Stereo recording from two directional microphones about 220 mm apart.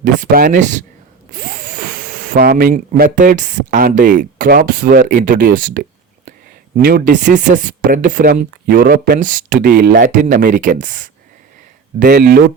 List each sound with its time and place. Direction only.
0.0 s speech: 35° right (ahead or behind)